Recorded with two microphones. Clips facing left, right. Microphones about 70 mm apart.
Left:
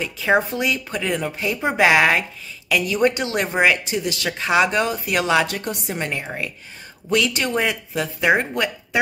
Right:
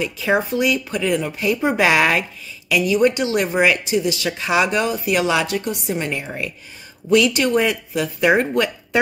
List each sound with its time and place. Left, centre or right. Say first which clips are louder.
0.0 s speech: even; left
2.7 s speech: right 3 dB; left